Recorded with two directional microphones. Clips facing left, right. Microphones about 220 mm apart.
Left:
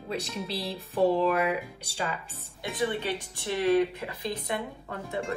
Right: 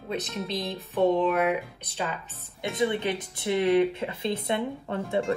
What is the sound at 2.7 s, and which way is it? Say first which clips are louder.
Speech: right 3 dB; 20° right (ahead or behind).